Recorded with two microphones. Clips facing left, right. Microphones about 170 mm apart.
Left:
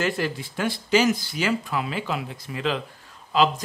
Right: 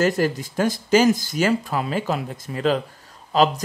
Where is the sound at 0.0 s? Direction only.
40° right (ahead or behind).